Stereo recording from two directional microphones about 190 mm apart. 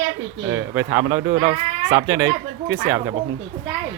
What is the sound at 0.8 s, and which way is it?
Speech, 10° right (ahead or behind).